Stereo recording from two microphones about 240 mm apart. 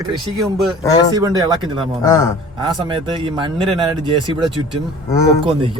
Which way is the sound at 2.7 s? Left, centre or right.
Right.